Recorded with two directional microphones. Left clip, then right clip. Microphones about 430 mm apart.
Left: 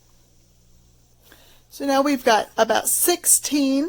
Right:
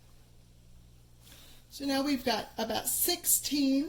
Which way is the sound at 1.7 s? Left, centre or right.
Centre.